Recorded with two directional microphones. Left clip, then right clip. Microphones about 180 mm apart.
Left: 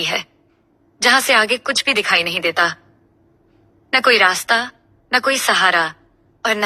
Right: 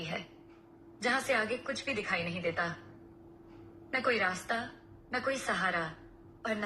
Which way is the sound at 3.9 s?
65° left (ahead or behind).